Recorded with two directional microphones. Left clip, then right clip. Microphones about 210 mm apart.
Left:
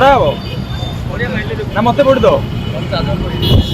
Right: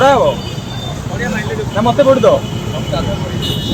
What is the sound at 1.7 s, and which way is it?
Speech, centre (ahead or behind).